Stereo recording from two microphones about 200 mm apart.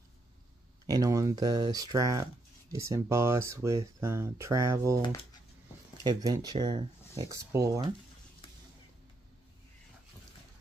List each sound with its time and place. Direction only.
0.8 s speech: 20° right (ahead or behind)
6.0 s speech: 20° right (ahead or behind)